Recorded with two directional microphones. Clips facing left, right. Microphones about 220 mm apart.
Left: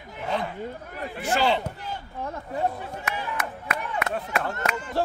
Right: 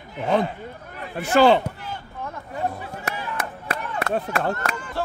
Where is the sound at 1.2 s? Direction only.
50° right (ahead or behind).